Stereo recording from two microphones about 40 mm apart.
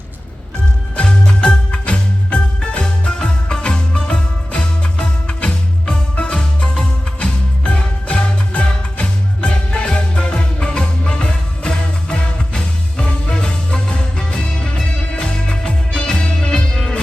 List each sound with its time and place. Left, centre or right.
0.9 s music: left